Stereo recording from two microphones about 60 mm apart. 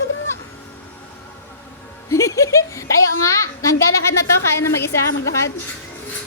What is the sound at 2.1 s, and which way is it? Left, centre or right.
A woman's voice, left.